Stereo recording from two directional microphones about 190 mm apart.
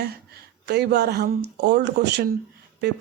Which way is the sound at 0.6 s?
60° right (ahead or behind).